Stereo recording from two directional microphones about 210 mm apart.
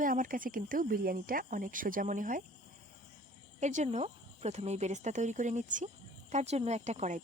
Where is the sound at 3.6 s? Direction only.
35° right (ahead or behind).